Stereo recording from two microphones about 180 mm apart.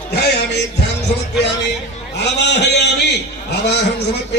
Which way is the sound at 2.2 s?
70° left (ahead or behind).